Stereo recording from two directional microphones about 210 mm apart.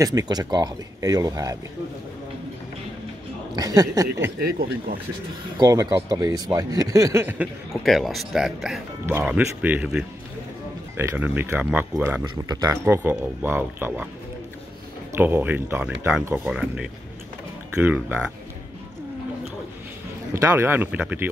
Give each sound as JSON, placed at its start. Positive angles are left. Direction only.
{"t": 0.0, "sound": "speech", "side_deg": -15}
{"t": 3.5, "sound": "speech", "side_deg": -15}
{"t": 4.6, "sound": "speech", "side_deg": -45}
{"t": 5.6, "sound": "speech", "side_deg": -15}
{"t": 15.1, "sound": "speech", "side_deg": -10}
{"t": 20.3, "sound": "speech", "side_deg": -10}